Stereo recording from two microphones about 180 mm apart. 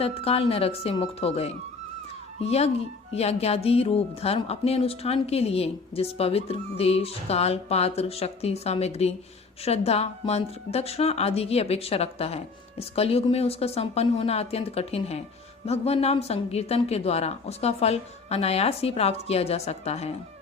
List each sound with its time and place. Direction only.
0.0 s a woman's voice: 30° left (ahead or behind)